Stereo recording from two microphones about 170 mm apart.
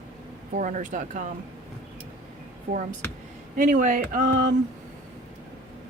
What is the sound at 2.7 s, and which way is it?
Speech, 55° right (ahead or behind).